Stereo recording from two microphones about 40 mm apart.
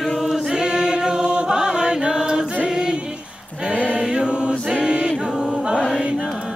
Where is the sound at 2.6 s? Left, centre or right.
Centre.